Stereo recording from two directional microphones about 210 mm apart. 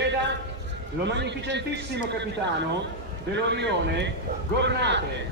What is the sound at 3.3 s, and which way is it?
A man's voice, 55° right (ahead or behind).